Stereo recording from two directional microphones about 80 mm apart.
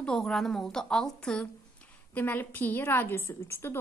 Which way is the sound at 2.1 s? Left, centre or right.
Left.